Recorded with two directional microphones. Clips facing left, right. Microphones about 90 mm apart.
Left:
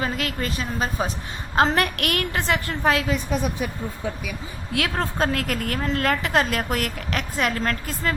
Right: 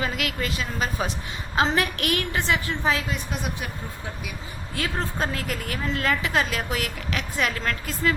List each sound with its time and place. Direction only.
0.0 s a woman's voice: 40° left (ahead or behind)
1.5 s a woman's voice: 50° left (ahead or behind)
4.7 s a woman's voice: 65° left (ahead or behind); by 8.1 s 45° left (ahead or behind)